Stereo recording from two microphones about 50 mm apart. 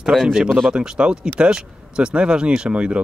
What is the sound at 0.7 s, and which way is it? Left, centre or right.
A man's voice, centre.